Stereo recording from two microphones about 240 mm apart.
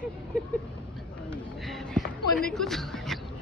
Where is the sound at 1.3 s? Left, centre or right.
Centre.